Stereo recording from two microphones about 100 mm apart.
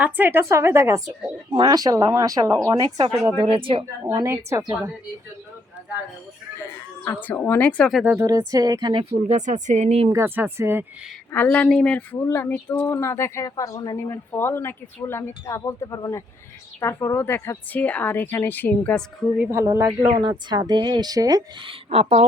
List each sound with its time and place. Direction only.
0.0 s a woman's voice: 20° right (ahead or behind); by 2.9 s 35° right (ahead or behind)
3.0 s speech: 60° right (ahead or behind)
4.0 s a woman's voice: 30° right (ahead or behind)
7.0 s speech: 15° left (ahead or behind)
8.2 s speech: 40° right (ahead or behind)
9.8 s speech: 90° right
10.1 s a woman's voice: 25° right (ahead or behind)
11.3 s speech: 15° left (ahead or behind)
12.1 s speech: 25° left (ahead or behind)
13.9 s speech: 25° left (ahead or behind)
19.4 s a woman's voice: 25° right (ahead or behind)
21.6 s speech: 75° right (ahead or behind)